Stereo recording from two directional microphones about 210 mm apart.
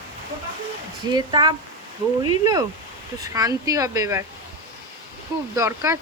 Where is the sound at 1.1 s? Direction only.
20° right (ahead or behind).